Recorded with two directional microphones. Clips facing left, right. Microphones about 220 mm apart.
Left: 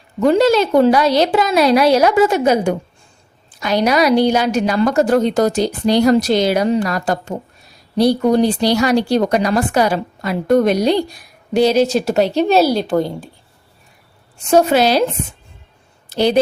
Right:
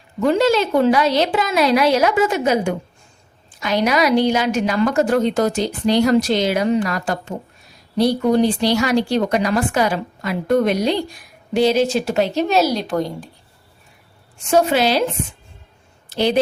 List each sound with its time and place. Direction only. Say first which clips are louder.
0.2 s speech: left 3 dB; 40° left (ahead or behind)
14.5 s speech: left 3 dB; 40° left (ahead or behind)
16.1 s speech: left 3 dB; 40° left (ahead or behind)